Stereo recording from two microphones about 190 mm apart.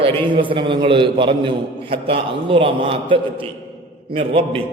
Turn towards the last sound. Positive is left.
turn(degrees=-30)  # may be behind; listen again after turning